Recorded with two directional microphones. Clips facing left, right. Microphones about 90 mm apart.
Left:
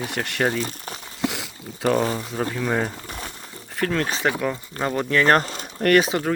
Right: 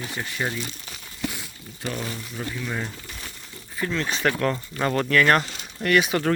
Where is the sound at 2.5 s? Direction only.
55° left (ahead or behind).